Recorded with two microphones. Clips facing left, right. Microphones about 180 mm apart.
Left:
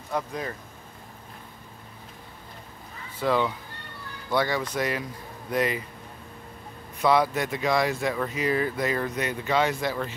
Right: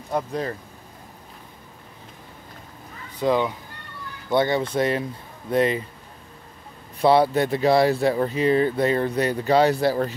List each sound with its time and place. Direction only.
0.1 s speech: 35° right (ahead or behind)
3.2 s speech: 20° right (ahead or behind)
7.0 s speech: 30° right (ahead or behind)